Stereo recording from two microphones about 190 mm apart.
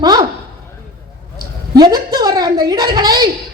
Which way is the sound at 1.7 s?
20° right (ahead or behind).